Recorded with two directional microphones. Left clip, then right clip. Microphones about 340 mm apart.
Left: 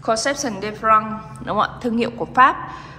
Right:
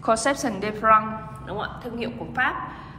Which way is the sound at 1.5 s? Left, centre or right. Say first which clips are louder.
Left 11 dB; centre.